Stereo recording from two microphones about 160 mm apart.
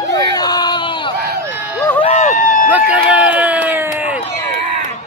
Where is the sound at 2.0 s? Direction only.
50° left (ahead or behind).